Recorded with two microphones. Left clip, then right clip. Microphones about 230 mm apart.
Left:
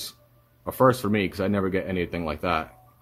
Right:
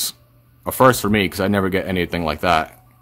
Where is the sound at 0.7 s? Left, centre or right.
Right.